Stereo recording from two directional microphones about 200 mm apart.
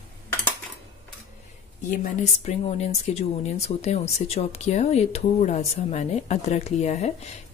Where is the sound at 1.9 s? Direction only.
35° left (ahead or behind).